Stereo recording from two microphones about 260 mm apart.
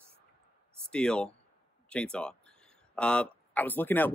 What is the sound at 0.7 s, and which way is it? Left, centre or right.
Speech, centre.